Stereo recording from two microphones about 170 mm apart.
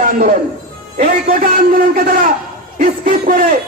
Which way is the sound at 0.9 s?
55° right (ahead or behind).